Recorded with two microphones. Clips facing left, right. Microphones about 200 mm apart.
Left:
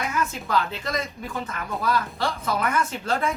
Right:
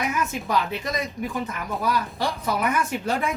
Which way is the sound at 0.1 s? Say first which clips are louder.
Even; 15° right (ahead or behind).